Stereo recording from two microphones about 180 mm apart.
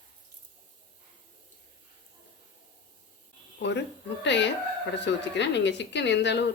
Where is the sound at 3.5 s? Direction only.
75° left (ahead or behind).